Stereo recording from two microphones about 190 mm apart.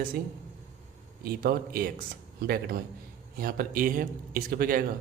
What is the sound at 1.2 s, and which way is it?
A man's voice, 50° right (ahead or behind).